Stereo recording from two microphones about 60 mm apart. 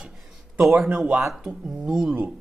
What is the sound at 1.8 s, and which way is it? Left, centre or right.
Speech, centre.